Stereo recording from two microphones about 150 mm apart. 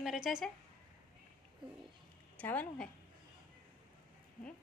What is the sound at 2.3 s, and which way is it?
Speech, 10° left (ahead or behind).